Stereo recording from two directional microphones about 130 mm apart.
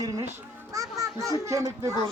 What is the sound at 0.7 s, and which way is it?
Speech, 25° right (ahead or behind).